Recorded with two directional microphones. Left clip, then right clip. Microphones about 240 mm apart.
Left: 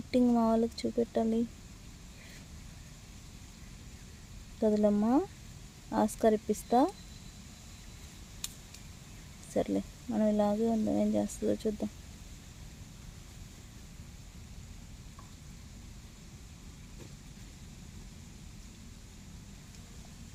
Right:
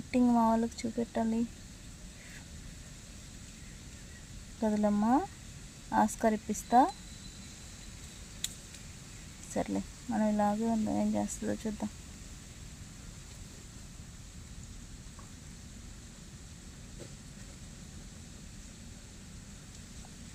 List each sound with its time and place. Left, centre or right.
0.1 s speech: centre
4.6 s speech: centre
9.5 s speech: centre